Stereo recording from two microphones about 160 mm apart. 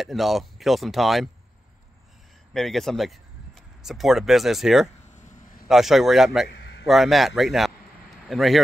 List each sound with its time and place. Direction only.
0.0 s a man's voice: centre (ahead or behind)
2.5 s speech: centre (ahead or behind)
5.1 s a sound: 50° left (ahead or behind)
5.7 s a man's voice: centre (ahead or behind)